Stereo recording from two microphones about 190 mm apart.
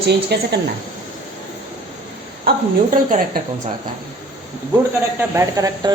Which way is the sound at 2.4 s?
50° right (ahead or behind).